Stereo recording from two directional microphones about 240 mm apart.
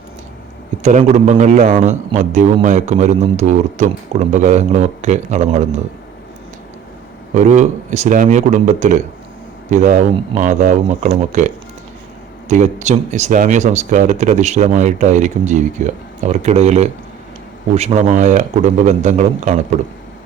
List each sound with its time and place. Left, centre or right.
0.8 s a man's voice: right
7.3 s a man's voice: right